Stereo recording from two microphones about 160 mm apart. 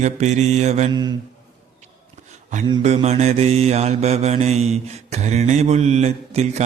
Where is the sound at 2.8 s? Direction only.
45° right (ahead or behind).